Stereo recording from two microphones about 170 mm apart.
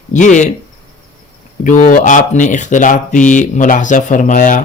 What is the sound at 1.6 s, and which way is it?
Speech, 50° left (ahead or behind).